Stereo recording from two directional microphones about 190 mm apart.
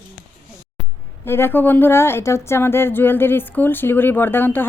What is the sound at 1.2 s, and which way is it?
A woman's voice, 10° left (ahead or behind).